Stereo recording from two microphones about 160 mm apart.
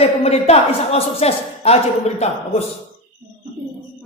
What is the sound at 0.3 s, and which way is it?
Speech, 40° left (ahead or behind).